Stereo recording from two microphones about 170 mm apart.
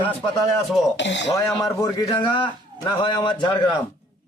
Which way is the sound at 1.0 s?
90° left.